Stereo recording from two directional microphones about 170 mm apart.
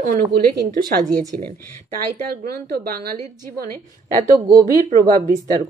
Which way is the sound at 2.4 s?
65° right (ahead or behind).